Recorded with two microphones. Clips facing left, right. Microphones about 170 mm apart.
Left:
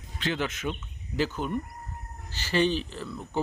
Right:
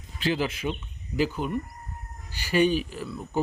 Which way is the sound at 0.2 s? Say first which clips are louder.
Right 3 dB; 10° right (ahead or behind).